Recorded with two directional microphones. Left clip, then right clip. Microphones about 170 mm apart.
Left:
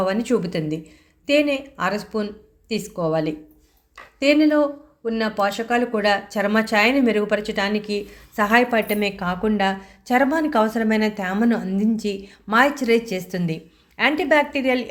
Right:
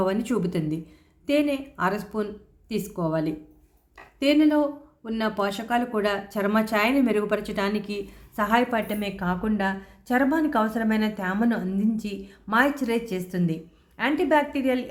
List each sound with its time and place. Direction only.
0.0 s speech: 5° left (ahead or behind)